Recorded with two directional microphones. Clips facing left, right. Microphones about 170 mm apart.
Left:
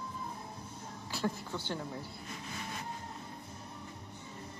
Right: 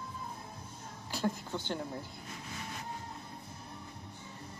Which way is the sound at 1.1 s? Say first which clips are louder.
Right 1 dB; 15° right (ahead or behind).